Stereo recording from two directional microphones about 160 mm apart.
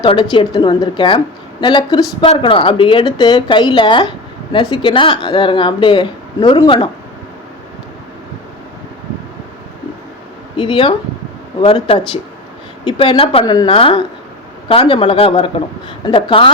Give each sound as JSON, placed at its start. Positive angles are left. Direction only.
{"t": 0.0, "sound": "a woman's voice", "side_deg": 30}
{"t": 10.6, "sound": "speech", "side_deg": 30}
{"t": 13.4, "sound": "a woman's voice", "side_deg": 25}